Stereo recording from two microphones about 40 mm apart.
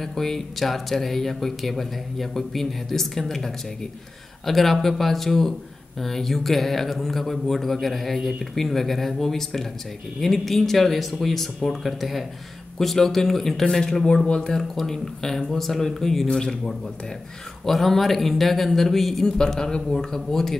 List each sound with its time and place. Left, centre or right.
0.0 s speech: centre
14.2 s speech: left
14.6 s speech: centre
19.2 s speech: centre